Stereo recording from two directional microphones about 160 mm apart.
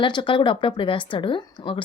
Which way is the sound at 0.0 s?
30° left (ahead or behind).